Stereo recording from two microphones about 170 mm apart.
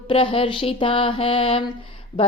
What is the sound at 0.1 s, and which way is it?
Mantra, 30° left (ahead or behind).